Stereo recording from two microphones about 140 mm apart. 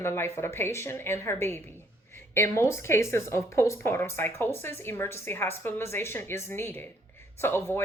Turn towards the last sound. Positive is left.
turn(degrees=15)  # may be behind; listen again after turning